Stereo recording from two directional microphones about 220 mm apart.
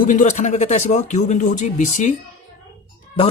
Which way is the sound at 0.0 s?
35° left (ahead or behind).